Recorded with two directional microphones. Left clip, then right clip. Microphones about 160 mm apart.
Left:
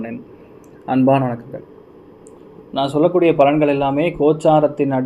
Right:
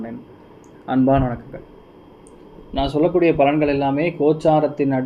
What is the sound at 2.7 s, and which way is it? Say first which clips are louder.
Speech: left 2 dB; 25° left (ahead or behind).